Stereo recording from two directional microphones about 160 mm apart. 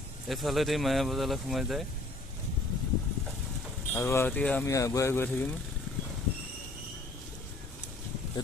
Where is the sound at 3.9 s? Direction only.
15° left (ahead or behind).